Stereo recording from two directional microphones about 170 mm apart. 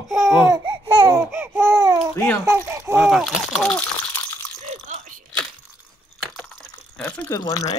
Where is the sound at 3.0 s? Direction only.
Centre (ahead or behind).